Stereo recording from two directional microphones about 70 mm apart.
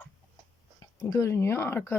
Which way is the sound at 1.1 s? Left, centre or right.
Left.